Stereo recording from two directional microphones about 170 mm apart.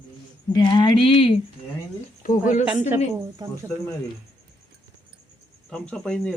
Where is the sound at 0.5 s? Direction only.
25° left (ahead or behind).